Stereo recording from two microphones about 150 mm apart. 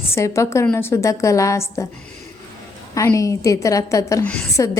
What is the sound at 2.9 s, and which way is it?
A woman's voice, 20° left (ahead or behind).